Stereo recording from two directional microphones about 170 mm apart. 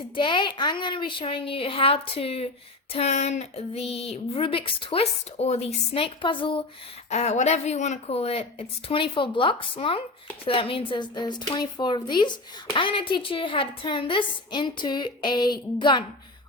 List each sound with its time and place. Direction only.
0.2 s speech: 30° left (ahead or behind)
7.1 s speech: 40° left (ahead or behind)